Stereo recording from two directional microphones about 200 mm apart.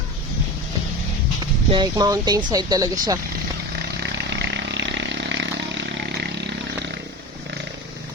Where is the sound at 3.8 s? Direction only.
55° right (ahead or behind).